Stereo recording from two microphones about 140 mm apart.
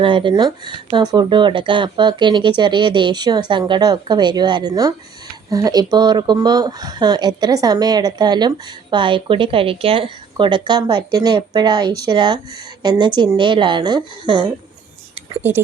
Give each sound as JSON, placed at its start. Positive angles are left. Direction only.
{"t": 0.0, "sound": "speech", "side_deg": -35}